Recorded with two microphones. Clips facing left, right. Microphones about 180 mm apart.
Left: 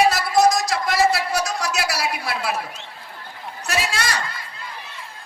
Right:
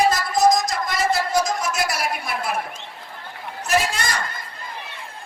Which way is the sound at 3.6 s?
75° left (ahead or behind).